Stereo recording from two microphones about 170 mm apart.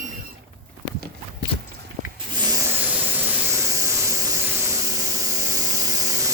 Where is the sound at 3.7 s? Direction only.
20° right (ahead or behind).